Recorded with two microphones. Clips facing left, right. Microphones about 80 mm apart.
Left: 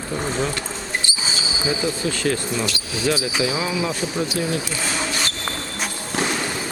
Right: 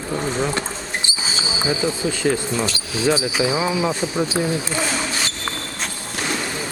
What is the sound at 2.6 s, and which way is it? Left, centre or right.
Speech, right.